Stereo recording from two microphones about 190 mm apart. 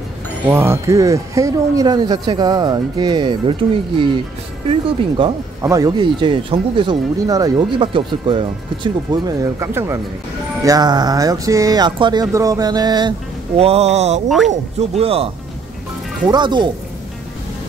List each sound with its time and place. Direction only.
0.5 s speech: 15° right (ahead or behind)
5.2 s speech: 25° right (ahead or behind)
13.6 s speech: 30° right (ahead or behind)